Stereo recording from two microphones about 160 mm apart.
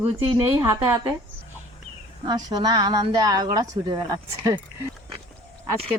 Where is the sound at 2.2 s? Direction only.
25° right (ahead or behind).